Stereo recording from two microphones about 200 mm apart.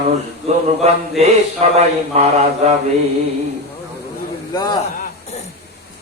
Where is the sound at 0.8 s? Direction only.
35° right (ahead or behind).